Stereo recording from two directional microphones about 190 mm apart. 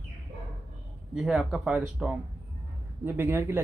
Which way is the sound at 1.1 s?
5° right (ahead or behind).